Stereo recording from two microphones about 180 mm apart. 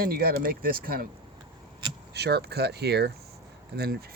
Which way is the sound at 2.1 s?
65° right (ahead or behind).